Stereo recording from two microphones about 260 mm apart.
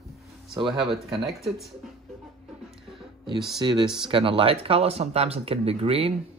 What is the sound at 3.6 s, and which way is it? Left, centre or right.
Speech, centre.